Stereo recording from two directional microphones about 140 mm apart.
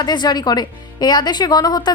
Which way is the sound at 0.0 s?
30° left (ahead or behind).